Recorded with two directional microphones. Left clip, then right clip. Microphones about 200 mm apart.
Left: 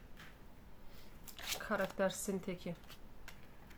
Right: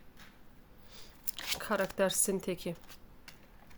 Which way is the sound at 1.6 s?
50° right (ahead or behind).